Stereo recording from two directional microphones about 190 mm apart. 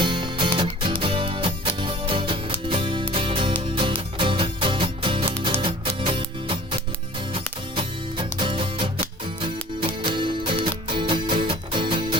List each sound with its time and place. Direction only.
0.0 s music: 25° right (ahead or behind)
10.2 s music: 25° right (ahead or behind)